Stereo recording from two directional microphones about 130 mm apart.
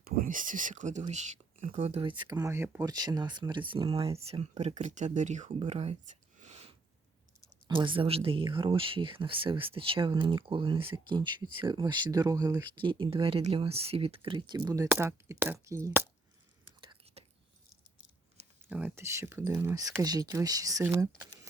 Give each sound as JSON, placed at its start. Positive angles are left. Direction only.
{"t": 0.2, "sound": "speech", "side_deg": -90}
{"t": 2.0, "sound": "speech", "side_deg": -35}
{"t": 2.4, "sound": "speech", "side_deg": -20}
{"t": 2.8, "sound": "speech", "side_deg": -30}
{"t": 4.3, "sound": "speech", "side_deg": -55}
{"t": 6.4, "sound": "a sound", "side_deg": -50}
{"t": 7.7, "sound": "speech", "side_deg": -40}
{"t": 16.8, "sound": "whispering", "side_deg": -40}
{"t": 18.7, "sound": "speech", "side_deg": -10}